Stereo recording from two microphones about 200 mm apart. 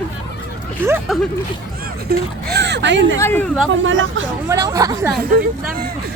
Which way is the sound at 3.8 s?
75° right (ahead or behind).